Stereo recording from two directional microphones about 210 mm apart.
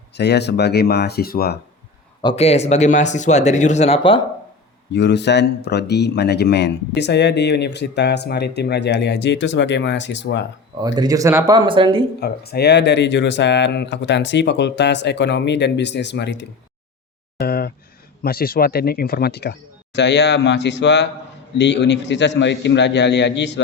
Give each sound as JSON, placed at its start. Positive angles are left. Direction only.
{"t": 0.2, "sound": "speech", "side_deg": 55}
{"t": 2.2, "sound": "speech", "side_deg": 30}
{"t": 4.9, "sound": "speech", "side_deg": 55}
{"t": 10.8, "sound": "speech", "side_deg": -20}
{"t": 12.2, "sound": "speech", "side_deg": 50}
{"t": 17.3, "sound": "a sound", "side_deg": 45}
{"t": 18.2, "sound": "speech", "side_deg": 45}